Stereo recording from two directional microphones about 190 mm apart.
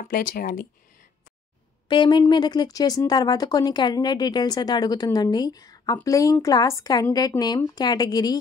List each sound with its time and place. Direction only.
0.0 s speech: 45° left (ahead or behind)
1.9 s speech: 25° left (ahead or behind)